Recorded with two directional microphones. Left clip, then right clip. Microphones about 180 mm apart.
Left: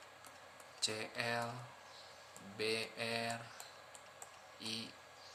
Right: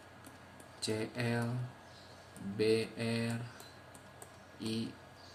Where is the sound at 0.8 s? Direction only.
15° left (ahead or behind).